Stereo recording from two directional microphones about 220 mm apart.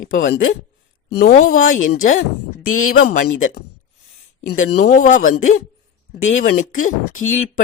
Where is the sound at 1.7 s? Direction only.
65° left (ahead or behind).